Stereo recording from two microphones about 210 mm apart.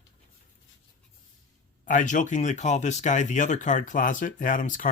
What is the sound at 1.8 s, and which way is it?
Speech, 40° left (ahead or behind).